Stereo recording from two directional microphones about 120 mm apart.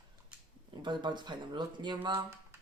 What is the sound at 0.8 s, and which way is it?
Speech, 40° right (ahead or behind).